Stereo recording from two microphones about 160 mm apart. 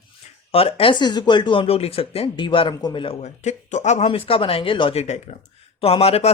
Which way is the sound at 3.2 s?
45° left (ahead or behind).